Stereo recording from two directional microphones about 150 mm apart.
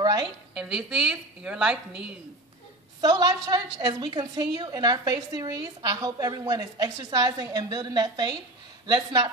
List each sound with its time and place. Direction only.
0.6 s a woman's voice: 5° right (ahead or behind)
3.0 s a woman's voice: 25° right (ahead or behind)